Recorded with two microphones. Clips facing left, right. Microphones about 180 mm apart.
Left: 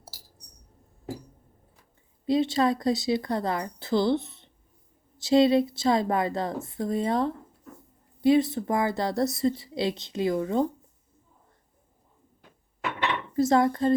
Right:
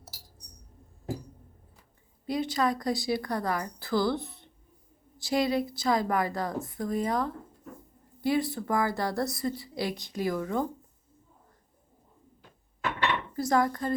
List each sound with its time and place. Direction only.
2.2 s a woman's voice: 25° left (ahead or behind)
13.3 s a woman's voice: 25° left (ahead or behind)